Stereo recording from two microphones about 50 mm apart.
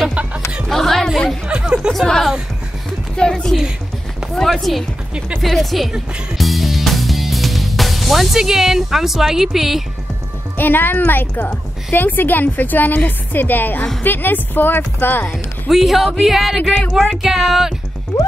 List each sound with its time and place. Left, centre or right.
0.1 s music: right
0.7 s music: centre
1.5 s chatter: centre
3.2 s a woman's voice: centre
4.4 s a woman's voice: centre
6.3 s music: centre
10.6 s a woman's voice: left
15.7 s speech: centre